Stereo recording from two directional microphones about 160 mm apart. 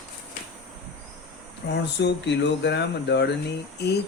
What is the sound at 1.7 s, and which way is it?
Speech, 90° left.